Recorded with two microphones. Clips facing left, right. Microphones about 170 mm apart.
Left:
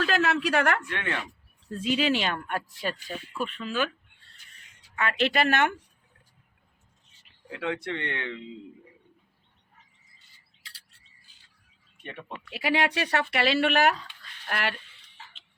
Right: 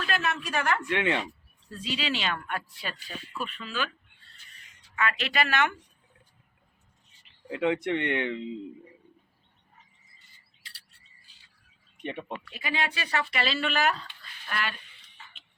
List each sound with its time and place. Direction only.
0.0 s a woman's voice: 85° left; by 0.8 s 65° left (ahead or behind)
0.9 s speech: 15° right (ahead or behind)
1.7 s speech: 50° left (ahead or behind)
4.9 s speech: 50° left (ahead or behind)
7.5 s speech: 20° right (ahead or behind)
12.5 s speech: 80° left